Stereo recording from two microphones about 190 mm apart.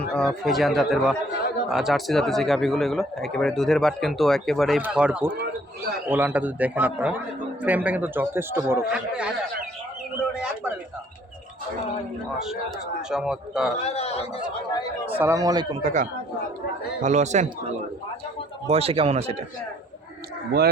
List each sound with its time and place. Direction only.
0.1 s speech: 5° left (ahead or behind)
10.3 s a sound: 5° right (ahead or behind)
13.0 s speech: 5° right (ahead or behind)
13.8 s speech: 35° left (ahead or behind)
15.0 s speech: 10° right (ahead or behind)
15.8 s speech: 40° right (ahead or behind)